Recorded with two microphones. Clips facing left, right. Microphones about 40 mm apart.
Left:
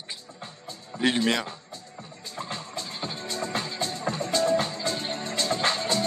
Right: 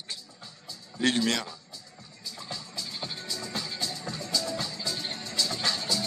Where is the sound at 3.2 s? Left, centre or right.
Left.